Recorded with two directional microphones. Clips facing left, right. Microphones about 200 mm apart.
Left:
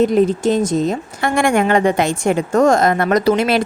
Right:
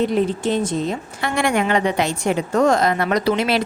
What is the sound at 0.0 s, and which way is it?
A woman's voice, 45° left (ahead or behind).